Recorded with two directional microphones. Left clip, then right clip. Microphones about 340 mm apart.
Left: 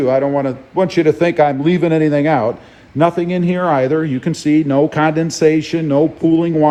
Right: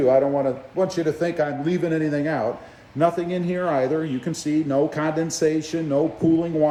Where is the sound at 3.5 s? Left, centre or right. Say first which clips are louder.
Left 7 dB; left.